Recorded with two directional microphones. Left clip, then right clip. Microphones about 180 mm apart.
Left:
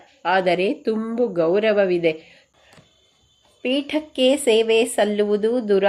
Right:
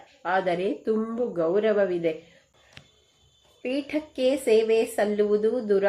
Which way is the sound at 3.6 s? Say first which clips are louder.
Left 6 dB; 30° left (ahead or behind).